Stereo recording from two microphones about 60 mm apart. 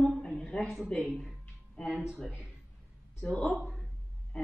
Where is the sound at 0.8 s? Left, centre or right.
Centre.